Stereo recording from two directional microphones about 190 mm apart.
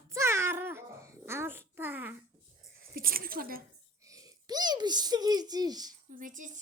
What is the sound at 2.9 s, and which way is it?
Speech, 50° right (ahead or behind).